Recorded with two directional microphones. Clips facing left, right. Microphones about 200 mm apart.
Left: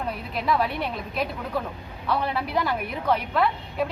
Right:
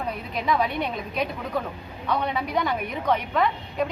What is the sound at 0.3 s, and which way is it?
A woman's voice, 5° left (ahead or behind).